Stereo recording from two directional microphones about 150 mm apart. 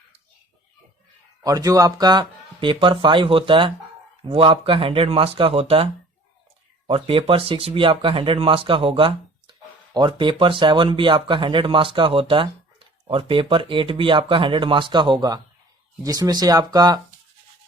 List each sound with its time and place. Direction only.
1.5 s speech: 20° right (ahead or behind)